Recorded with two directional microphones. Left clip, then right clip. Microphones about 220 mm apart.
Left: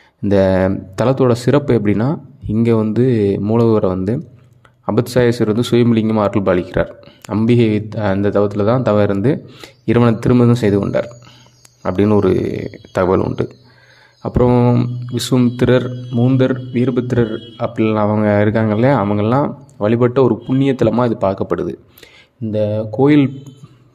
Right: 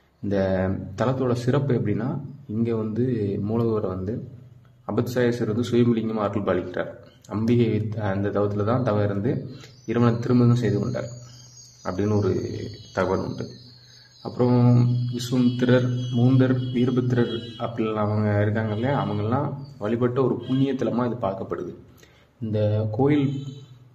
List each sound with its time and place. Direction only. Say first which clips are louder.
0.2 s speech: left 11 dB; 50° left (ahead or behind)